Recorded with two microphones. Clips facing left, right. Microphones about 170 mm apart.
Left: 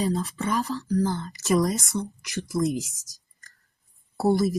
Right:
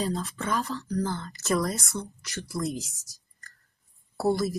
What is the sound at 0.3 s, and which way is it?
Speech, 15° left (ahead or behind).